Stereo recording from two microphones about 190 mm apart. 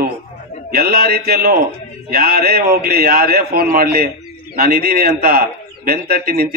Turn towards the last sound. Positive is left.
turn(degrees=-50)  # may be behind; listen again after turning